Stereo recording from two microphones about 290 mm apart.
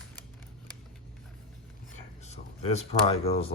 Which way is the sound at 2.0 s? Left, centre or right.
Left.